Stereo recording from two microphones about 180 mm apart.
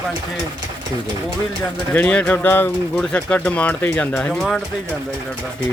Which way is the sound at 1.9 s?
5° left (ahead or behind).